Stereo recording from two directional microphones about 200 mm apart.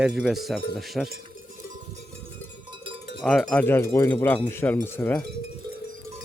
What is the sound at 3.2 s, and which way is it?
Cowbell, 5° left (ahead or behind).